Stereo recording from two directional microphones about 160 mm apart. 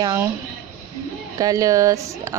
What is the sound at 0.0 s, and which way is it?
Speech, 20° right (ahead or behind).